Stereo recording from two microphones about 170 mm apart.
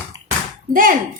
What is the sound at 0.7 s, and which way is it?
Speech, 55° right (ahead or behind).